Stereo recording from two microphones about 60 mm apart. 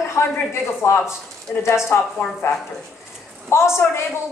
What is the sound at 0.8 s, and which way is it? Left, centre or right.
Speech, left.